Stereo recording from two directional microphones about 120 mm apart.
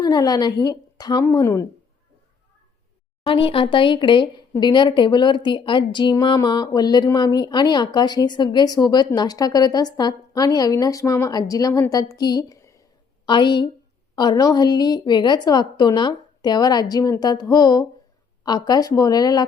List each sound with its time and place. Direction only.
0.0 s a woman's voice: 30° left (ahead or behind)
3.2 s a woman's voice: 45° left (ahead or behind); by 12.8 s 25° left (ahead or behind)
13.2 s a woman's voice: 40° left (ahead or behind)